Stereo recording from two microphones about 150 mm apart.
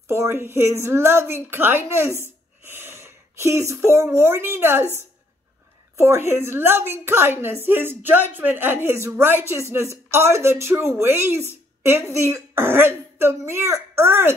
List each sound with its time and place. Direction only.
0.1 s a woman's voice: 15° right (ahead or behind)
5.9 s a woman's voice: 15° right (ahead or behind)